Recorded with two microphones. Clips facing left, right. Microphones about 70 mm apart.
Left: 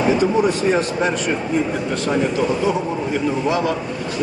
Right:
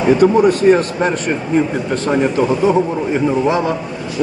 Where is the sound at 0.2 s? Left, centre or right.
Right.